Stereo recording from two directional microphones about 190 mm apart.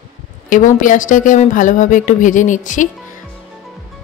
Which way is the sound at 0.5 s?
45° left (ahead or behind).